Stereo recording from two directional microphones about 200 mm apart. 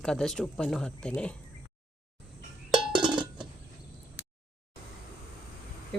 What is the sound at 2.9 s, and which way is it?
Cowbell, 25° right (ahead or behind).